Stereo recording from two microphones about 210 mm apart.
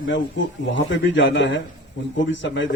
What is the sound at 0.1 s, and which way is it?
A man's voice, 60° left (ahead or behind).